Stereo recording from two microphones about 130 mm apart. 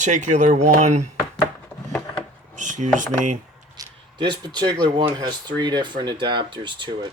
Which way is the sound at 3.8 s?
30° right (ahead or behind).